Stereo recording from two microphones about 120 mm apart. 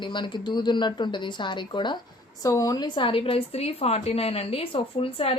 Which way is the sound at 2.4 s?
30° left (ahead or behind).